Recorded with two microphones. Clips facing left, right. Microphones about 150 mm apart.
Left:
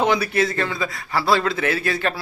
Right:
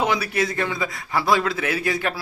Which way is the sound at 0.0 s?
10° right (ahead or behind).